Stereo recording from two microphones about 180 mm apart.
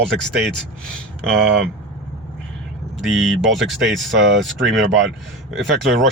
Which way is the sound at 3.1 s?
Centre (ahead or behind).